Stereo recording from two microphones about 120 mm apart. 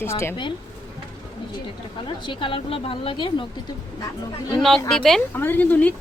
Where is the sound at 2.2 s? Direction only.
45° left (ahead or behind).